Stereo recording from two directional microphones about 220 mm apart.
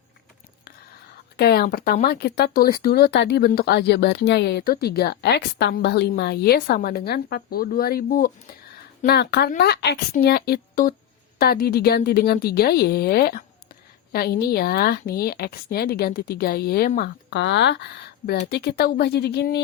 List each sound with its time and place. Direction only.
1.4 s a woman's voice: 45° left (ahead or behind)